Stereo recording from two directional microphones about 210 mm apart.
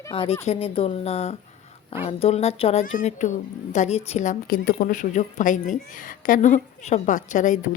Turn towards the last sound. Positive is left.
turn(degrees=35)  # may be behind; listen again after turning